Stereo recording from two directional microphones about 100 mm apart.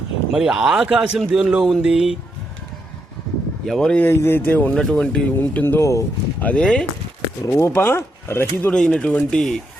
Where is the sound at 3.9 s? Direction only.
20° left (ahead or behind).